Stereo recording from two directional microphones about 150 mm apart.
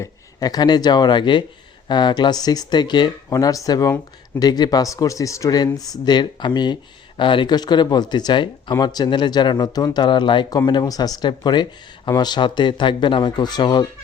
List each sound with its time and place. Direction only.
0.0 s speech: 25° left (ahead or behind)